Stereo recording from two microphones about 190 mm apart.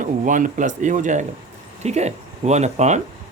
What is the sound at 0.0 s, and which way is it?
Speech, 45° right (ahead or behind).